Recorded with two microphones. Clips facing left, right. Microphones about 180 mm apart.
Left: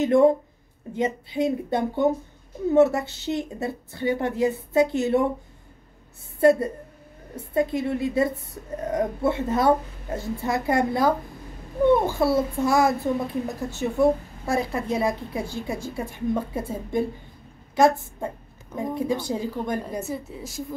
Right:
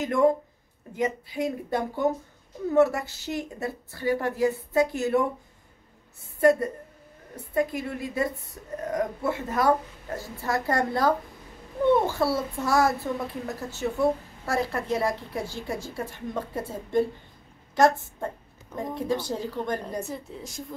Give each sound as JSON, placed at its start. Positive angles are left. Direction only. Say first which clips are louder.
{"t": 0.0, "sound": "a woman's voice", "louder": "left 5 dB", "side_deg": 25}
{"t": 6.4, "sound": "a woman's voice", "louder": "left 2 dB", "side_deg": 25}